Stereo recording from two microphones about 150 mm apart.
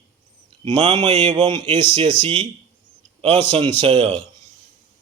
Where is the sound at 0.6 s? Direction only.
30° right (ahead or behind).